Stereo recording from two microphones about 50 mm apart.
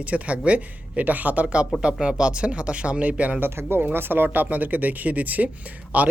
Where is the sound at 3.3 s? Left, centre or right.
Right.